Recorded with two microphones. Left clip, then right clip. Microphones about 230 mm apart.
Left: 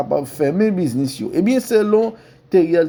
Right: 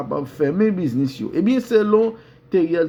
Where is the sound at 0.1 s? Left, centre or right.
Left.